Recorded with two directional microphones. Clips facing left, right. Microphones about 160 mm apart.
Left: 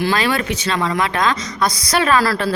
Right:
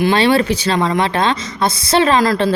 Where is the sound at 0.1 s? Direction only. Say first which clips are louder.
Right 6 dB; 30° right (ahead or behind).